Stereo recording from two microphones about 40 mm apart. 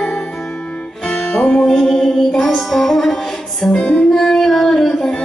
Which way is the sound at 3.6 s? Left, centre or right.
Left.